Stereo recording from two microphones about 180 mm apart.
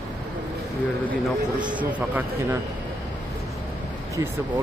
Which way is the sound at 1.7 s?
10° right (ahead or behind).